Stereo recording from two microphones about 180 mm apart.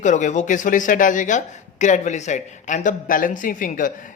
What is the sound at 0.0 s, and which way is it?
Speech, 40° left (ahead or behind).